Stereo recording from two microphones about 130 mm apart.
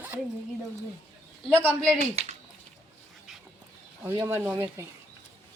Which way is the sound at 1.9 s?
55° right (ahead or behind).